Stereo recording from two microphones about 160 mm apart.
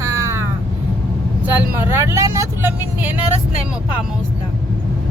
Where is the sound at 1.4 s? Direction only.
15° right (ahead or behind).